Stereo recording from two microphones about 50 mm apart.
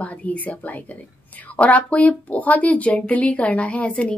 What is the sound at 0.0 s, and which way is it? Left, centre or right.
Speech, left.